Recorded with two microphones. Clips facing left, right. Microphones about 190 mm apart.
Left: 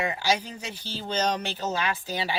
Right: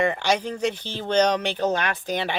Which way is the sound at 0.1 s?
60° right (ahead or behind).